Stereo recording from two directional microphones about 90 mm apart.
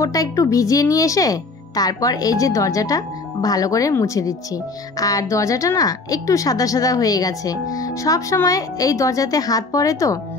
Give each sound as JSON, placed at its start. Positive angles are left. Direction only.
{"t": 0.0, "sound": "speech", "side_deg": 40}